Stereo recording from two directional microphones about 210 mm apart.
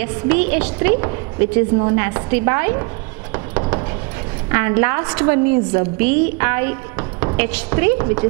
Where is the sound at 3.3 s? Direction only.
20° right (ahead or behind).